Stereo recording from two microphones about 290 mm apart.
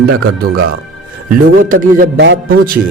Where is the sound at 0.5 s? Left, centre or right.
Right.